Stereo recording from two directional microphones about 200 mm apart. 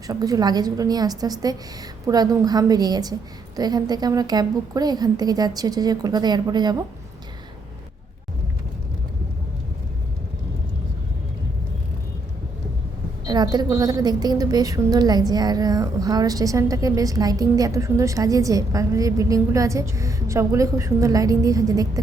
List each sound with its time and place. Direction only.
0.1 s a woman's voice: 20° right (ahead or behind)
13.2 s a woman's voice: 20° right (ahead or behind)